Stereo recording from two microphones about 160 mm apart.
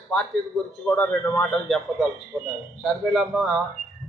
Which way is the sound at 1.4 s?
Centre (ahead or behind).